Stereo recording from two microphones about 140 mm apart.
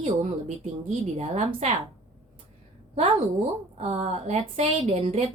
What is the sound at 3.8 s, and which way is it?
A woman's voice, 55° right (ahead or behind).